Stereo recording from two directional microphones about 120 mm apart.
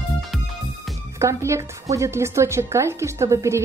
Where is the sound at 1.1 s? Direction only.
25° right (ahead or behind).